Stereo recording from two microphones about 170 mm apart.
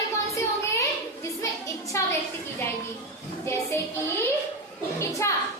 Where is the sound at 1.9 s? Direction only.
15° left (ahead or behind).